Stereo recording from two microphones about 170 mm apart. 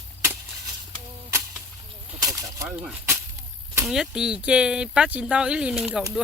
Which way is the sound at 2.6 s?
5° right (ahead or behind).